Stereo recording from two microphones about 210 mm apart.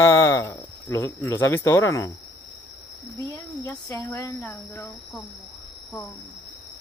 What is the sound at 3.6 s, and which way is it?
A man's voice, 15° left (ahead or behind).